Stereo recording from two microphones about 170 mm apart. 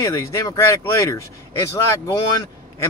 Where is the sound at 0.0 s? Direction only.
20° left (ahead or behind).